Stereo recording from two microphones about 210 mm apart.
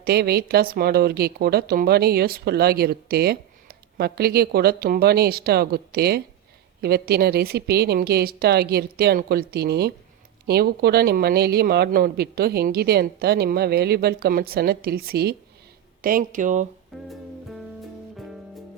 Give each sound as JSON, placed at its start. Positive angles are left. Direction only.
{"t": 0.0, "sound": "a woman's voice", "side_deg": -45}